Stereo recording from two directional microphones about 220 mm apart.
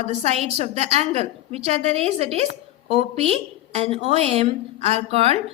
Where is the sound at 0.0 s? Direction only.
30° right (ahead or behind).